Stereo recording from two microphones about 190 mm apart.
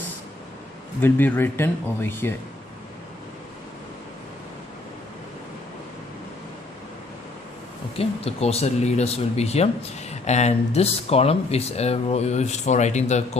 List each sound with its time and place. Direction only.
1.0 s speech: 10° left (ahead or behind)
7.9 s speech: 30° left (ahead or behind)